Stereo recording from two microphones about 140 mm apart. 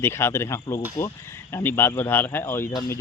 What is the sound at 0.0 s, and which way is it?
Speech, 20° left (ahead or behind).